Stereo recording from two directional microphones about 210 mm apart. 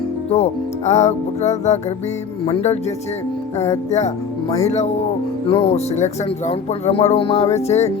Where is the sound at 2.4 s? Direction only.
30° left (ahead or behind).